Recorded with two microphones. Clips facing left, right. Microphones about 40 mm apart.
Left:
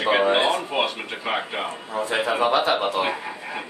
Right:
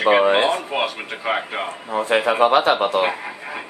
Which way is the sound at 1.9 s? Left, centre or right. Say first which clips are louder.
Right 5 dB; right.